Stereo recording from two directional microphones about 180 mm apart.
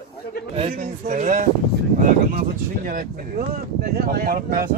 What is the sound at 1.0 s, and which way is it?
Speech, 40° right (ahead or behind).